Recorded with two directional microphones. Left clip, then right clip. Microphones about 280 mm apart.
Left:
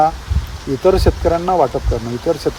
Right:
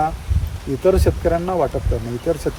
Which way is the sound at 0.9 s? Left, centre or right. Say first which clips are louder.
Left 3 dB; left.